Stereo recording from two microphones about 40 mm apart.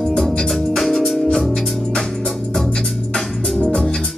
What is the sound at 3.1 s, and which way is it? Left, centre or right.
Music, centre.